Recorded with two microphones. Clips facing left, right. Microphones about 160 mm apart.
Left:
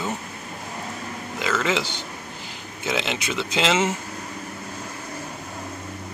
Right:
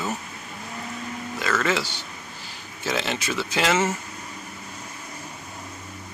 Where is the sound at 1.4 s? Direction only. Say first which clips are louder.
Left 1 dB; 15° left (ahead or behind).